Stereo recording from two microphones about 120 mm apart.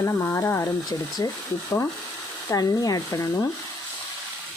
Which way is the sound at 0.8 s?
35° left (ahead or behind).